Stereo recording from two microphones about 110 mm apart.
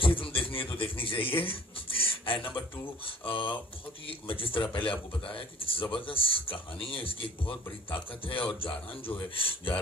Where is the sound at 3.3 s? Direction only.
55° left (ahead or behind).